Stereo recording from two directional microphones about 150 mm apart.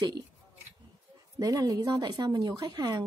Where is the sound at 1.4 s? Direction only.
25° right (ahead or behind).